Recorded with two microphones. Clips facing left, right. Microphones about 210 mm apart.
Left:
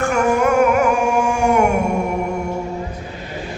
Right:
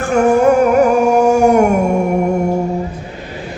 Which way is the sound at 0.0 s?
35° right (ahead or behind).